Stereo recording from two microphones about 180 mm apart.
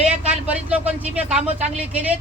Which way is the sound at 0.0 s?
10° right (ahead or behind).